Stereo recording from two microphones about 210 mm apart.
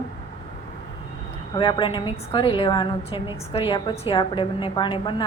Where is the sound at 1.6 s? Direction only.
20° left (ahead or behind).